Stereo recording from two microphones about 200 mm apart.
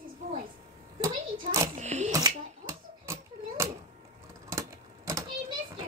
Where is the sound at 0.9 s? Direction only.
15° right (ahead or behind).